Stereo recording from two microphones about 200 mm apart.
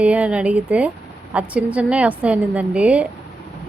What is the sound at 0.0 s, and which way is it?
A woman's voice, 5° right (ahead or behind).